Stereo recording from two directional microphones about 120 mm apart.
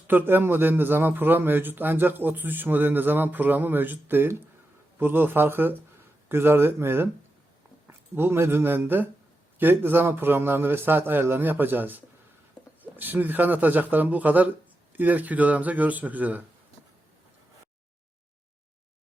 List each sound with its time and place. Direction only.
0.1 s a man's voice: 15° right (ahead or behind)